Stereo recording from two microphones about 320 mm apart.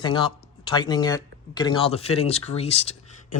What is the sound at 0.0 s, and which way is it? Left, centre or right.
Speech, centre.